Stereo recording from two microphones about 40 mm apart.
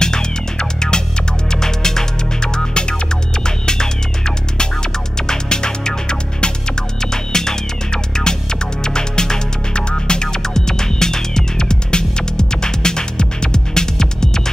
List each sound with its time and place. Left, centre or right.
0.0 s music: centre